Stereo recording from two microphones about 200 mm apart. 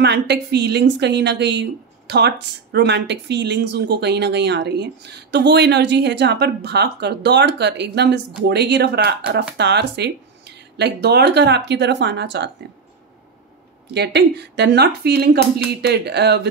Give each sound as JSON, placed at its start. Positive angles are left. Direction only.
{"t": 0.0, "sound": "a woman's voice", "side_deg": -55}
{"t": 13.9, "sound": "a woman's voice", "side_deg": -55}